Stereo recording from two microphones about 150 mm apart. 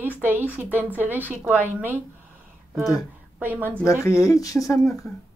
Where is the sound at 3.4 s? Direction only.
10° right (ahead or behind).